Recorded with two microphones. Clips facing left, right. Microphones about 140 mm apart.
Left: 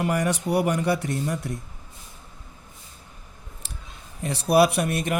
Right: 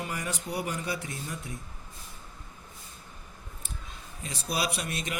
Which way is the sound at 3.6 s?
80° left.